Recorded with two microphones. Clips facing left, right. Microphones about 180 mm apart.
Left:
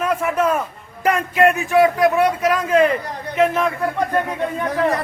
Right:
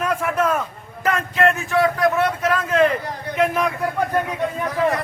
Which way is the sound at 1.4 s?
15° left (ahead or behind).